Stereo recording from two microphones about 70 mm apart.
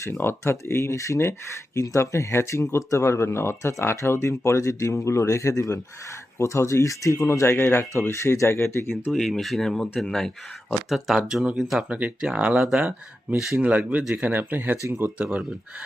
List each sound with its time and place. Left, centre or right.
0.0 s speech: left
0.5 s speech: left
7.4 s speech: left
9.1 s speech: centre
10.8 s speech: centre
11.9 s speech: centre
13.6 s speech: right
15.2 s speech: right